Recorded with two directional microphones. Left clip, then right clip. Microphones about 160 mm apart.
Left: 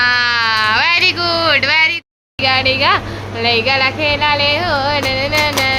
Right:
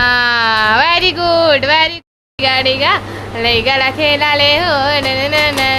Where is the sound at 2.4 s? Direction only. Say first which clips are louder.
Right 1 dB; 15° right (ahead or behind).